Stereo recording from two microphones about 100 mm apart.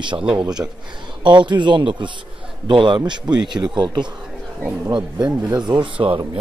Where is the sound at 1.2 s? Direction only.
50° right (ahead or behind).